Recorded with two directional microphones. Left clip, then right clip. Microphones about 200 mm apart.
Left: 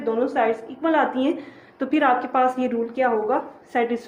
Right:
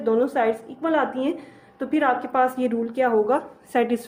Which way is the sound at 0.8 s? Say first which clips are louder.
Left 2 dB; 10° right (ahead or behind).